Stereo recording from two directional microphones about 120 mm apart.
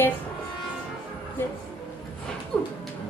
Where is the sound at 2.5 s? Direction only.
10° left (ahead or behind).